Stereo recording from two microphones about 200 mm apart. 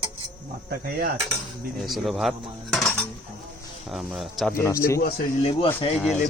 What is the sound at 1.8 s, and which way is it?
Cutlery, centre (ahead or behind).